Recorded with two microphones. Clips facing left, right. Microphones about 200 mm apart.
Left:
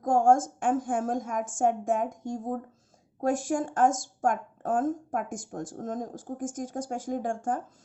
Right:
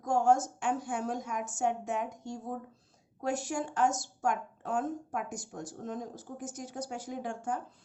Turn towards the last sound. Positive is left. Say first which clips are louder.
# left 6 dB
turn(degrees=50)  # may be behind; listen again after turning